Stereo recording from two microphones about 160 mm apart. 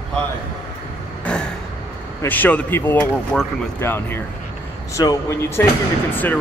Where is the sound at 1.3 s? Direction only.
5° left (ahead or behind).